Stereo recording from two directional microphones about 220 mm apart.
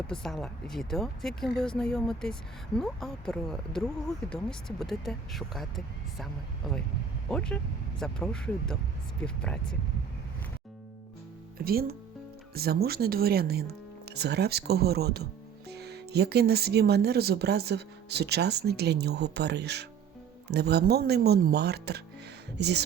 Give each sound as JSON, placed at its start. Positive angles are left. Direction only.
{"t": 0.1, "sound": "speech", "side_deg": 0}
{"t": 7.3, "sound": "speech", "side_deg": 5}
{"t": 11.5, "sound": "speech", "side_deg": -45}